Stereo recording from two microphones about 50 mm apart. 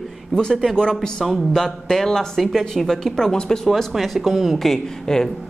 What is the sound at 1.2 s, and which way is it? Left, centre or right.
Speech, centre.